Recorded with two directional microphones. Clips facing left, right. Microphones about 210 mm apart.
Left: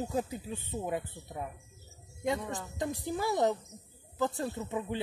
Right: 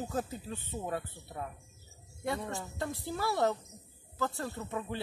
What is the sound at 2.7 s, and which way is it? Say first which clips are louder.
Speech: left 4 dB; 15° left (ahead or behind).